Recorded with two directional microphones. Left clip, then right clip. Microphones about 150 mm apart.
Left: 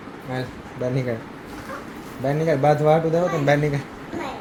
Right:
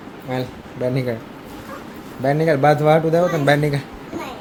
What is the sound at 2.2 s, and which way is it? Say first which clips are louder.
Speech: right 4 dB; 30° right (ahead or behind).